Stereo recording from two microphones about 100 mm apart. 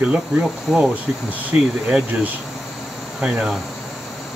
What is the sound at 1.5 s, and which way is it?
Speech, 20° right (ahead or behind).